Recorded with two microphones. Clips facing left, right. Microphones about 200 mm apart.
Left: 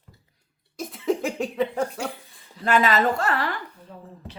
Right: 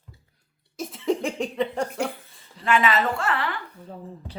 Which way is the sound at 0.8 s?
Centre (ahead or behind).